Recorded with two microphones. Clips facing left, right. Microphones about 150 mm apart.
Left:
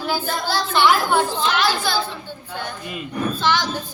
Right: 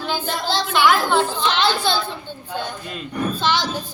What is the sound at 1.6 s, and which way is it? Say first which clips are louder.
A woman's voice: right 1 dB; 20° right (ahead or behind).